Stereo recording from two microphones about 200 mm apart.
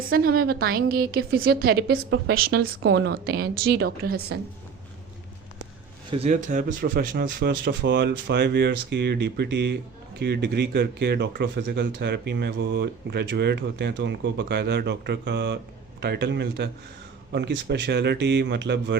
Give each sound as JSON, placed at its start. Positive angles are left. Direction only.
{"t": 0.1, "sound": "speech", "side_deg": -50}
{"t": 2.0, "sound": "a woman's voice", "side_deg": -70}
{"t": 2.3, "sound": "speech", "side_deg": -50}
{"t": 6.1, "sound": "speech", "side_deg": -30}
{"t": 6.3, "sound": "speech", "side_deg": -40}